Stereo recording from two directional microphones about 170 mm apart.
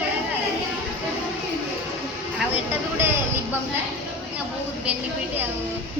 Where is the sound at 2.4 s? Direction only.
10° right (ahead or behind).